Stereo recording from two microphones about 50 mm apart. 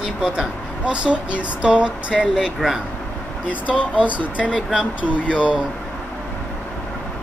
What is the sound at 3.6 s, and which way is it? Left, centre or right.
Speech, right.